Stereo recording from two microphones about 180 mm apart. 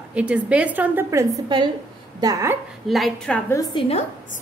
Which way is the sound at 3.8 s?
35° left (ahead or behind).